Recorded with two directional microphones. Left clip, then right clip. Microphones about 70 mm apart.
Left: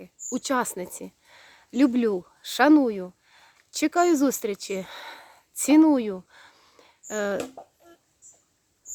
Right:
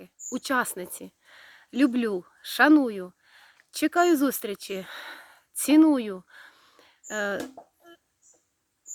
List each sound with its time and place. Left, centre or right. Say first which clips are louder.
0.3 s speech: left 1 dB; left